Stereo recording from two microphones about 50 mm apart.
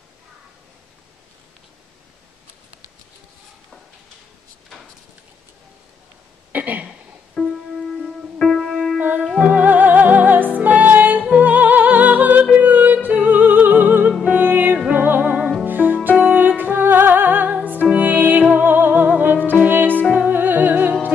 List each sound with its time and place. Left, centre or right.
6.5 s a sound: right
7.3 s music: centre
9.4 s music: right